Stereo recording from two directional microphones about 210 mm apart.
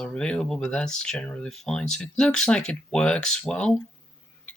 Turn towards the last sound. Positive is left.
turn(degrees=5)  # may be behind; listen again after turning